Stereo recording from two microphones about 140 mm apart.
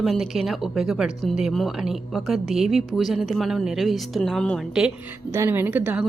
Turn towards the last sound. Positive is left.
turn(degrees=-10)  # may be behind; listen again after turning